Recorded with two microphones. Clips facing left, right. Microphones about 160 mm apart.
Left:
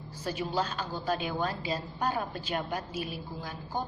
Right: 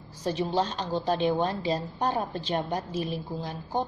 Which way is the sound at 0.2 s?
30° right (ahead or behind).